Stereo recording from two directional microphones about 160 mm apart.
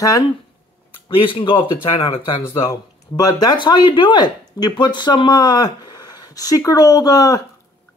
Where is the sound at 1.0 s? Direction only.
35° left (ahead or behind).